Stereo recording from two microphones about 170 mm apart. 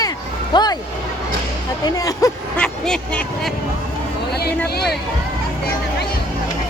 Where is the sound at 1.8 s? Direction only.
20° left (ahead or behind).